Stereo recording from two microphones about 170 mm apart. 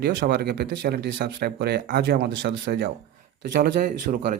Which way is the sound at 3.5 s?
55° right (ahead or behind).